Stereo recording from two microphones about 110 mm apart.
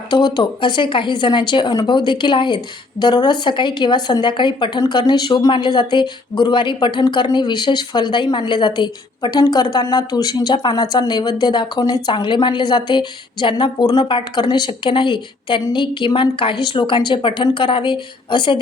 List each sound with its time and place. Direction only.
0.1 s a woman's voice: 40° left (ahead or behind)